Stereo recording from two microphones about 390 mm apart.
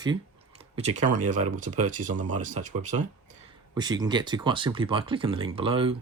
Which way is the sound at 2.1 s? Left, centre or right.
Right.